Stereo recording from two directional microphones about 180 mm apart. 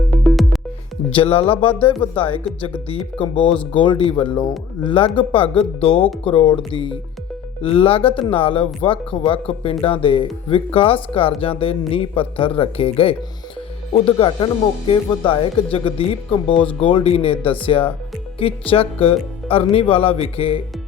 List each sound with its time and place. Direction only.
0.1 s music: centre (ahead or behind)
1.1 s speech: 30° left (ahead or behind)
3.0 s speech: 5° left (ahead or behind)
3.7 s speech: 25° left (ahead or behind)
7.6 s speech: 30° left (ahead or behind)